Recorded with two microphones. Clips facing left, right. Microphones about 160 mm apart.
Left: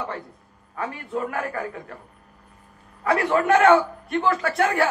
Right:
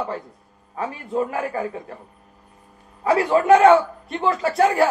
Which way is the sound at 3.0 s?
20° right (ahead or behind).